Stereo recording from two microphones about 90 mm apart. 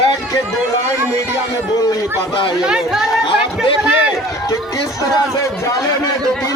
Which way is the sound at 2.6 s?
10° right (ahead or behind).